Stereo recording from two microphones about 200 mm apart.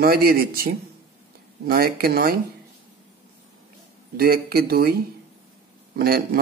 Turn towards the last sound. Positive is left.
turn(degrees=-50)  # may be behind; listen again after turning